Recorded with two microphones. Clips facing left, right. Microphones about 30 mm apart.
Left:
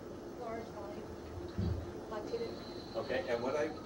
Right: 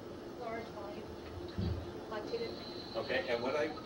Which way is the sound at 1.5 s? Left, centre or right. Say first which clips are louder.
Left 1 dB; right.